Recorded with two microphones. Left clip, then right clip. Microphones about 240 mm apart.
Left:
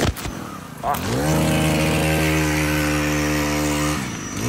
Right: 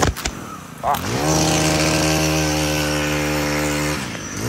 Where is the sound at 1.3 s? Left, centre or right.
Right; by 2.9 s centre.